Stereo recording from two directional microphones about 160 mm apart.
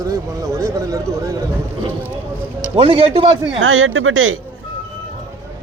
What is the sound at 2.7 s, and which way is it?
Speech, 35° right (ahead or behind).